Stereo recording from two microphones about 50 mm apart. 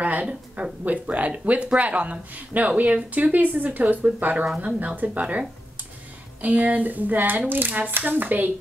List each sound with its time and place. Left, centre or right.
0.0 s speech: right
6.4 s speech: right